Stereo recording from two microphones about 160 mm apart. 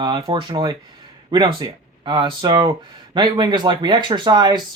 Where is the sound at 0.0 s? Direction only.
30° right (ahead or behind).